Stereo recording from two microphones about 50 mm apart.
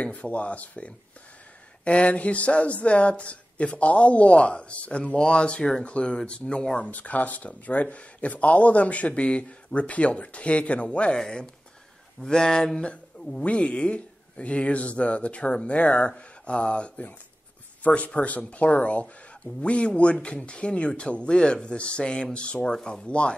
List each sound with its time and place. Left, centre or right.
0.0 s speech: left
6.9 s speech: left
11.1 s speech: centre